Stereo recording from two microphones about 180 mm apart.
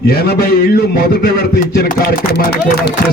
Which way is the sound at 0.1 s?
60° left (ahead or behind).